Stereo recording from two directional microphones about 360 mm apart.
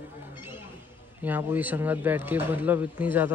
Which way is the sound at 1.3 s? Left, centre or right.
Centre.